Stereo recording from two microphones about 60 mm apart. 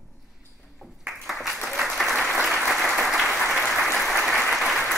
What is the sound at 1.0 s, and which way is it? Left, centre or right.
Applause, centre.